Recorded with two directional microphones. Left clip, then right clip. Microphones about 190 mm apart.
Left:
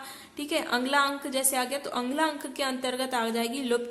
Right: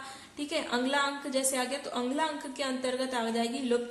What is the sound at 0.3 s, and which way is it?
A woman's voice, 25° left (ahead or behind).